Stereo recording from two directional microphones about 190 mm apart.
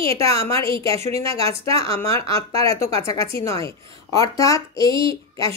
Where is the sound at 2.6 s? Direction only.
15° left (ahead or behind).